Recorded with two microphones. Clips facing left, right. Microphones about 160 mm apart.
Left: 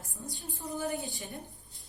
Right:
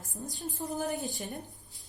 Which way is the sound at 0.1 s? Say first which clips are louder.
Right 5 dB; 40° right (ahead or behind).